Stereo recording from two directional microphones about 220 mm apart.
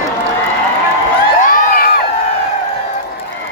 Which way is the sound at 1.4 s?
40° left (ahead or behind).